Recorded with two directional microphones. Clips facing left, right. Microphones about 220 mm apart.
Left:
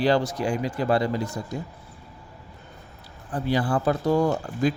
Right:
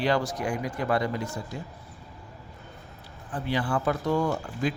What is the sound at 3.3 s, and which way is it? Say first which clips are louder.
Speech: left 4 dB; 40° left (ahead or behind).